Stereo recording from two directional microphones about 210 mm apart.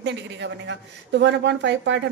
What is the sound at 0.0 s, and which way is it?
A man's voice, 55° right (ahead or behind).